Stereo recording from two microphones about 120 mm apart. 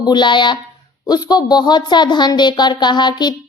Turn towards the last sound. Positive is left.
turn(degrees=40)  # may be behind; listen again after turning